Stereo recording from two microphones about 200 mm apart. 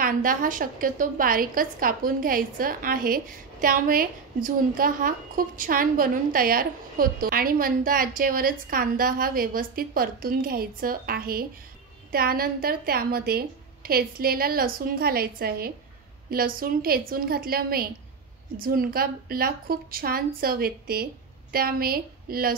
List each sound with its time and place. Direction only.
0.0 s a woman's voice: 45° right (ahead or behind)